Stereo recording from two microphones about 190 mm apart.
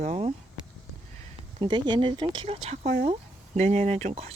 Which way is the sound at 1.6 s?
25° right (ahead or behind).